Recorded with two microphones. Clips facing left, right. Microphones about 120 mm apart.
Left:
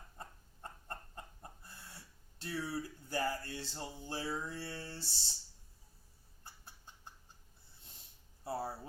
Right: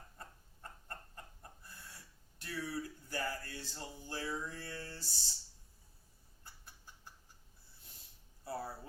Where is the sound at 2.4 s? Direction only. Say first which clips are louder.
Left 2 dB; 30° left (ahead or behind).